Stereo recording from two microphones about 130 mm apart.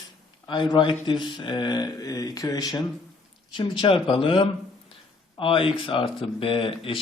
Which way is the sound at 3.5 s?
40° left (ahead or behind).